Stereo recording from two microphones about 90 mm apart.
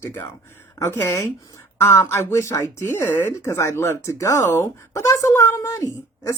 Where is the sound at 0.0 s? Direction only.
25° left (ahead or behind).